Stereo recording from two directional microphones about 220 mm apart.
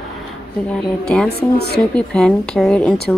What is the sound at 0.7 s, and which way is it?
A woman's voice, 5° left (ahead or behind).